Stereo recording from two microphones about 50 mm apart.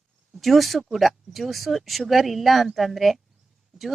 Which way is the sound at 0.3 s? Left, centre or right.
Centre.